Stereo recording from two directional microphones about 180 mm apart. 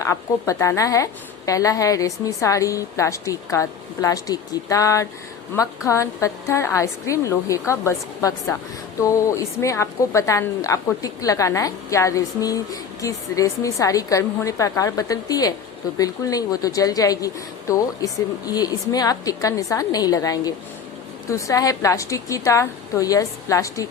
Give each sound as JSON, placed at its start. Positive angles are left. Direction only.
{"t": 0.0, "sound": "a woman's voice", "side_deg": 15}